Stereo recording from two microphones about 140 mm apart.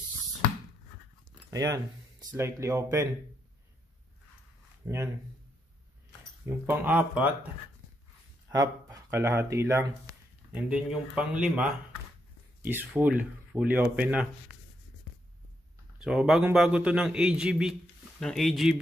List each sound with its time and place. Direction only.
1.5 s speech: 25° right (ahead or behind)
4.8 s speech: 20° right (ahead or behind)
6.6 s speech: 15° right (ahead or behind)
8.5 s speech: 25° right (ahead or behind)
10.7 s speech: 5° right (ahead or behind)
16.0 s speech: 5° right (ahead or behind)